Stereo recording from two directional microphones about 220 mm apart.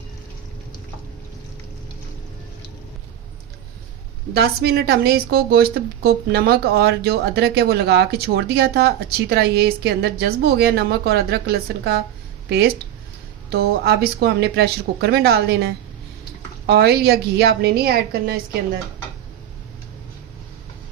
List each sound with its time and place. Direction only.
4.4 s a woman's voice: 45° right (ahead or behind)